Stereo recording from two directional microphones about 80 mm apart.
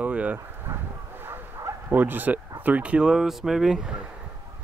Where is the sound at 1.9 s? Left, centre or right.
Right; by 3.9 s centre.